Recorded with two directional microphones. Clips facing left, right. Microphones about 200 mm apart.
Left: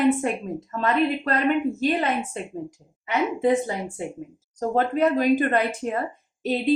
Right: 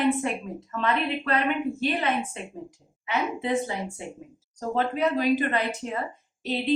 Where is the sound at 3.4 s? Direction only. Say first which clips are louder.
Left 5 dB; 50° left (ahead or behind).